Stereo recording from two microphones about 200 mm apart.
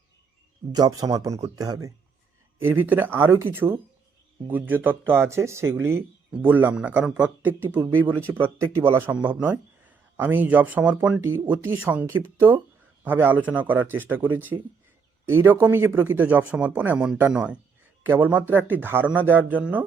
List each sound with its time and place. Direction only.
0.7 s speech: 20° right (ahead or behind)